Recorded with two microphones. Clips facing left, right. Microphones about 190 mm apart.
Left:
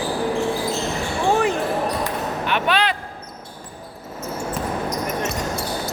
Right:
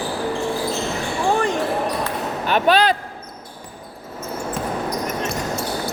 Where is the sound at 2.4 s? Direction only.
40° right (ahead or behind).